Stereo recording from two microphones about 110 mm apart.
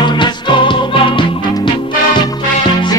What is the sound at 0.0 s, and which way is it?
Music, 45° left (ahead or behind).